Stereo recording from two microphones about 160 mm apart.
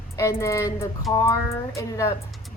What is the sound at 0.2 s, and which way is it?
A woman's voice, 20° left (ahead or behind).